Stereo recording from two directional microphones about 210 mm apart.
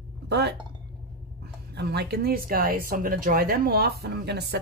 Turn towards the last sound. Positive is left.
turn(degrees=-50)  # may be behind; listen again after turning